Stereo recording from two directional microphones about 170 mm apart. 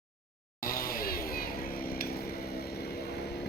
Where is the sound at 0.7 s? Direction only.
60° left (ahead or behind).